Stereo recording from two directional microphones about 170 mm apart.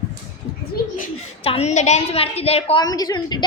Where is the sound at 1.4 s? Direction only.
40° left (ahead or behind).